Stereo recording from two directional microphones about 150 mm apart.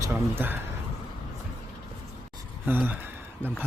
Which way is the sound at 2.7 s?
10° right (ahead or behind).